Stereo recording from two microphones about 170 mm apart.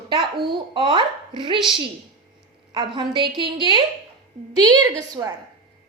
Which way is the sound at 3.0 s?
30° right (ahead or behind).